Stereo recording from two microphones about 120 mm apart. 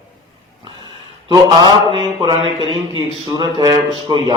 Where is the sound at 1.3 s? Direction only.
35° right (ahead or behind).